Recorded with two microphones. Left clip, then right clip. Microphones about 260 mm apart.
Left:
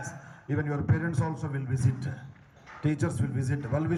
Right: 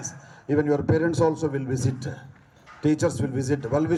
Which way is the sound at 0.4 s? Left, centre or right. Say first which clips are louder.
Right 10 dB; right.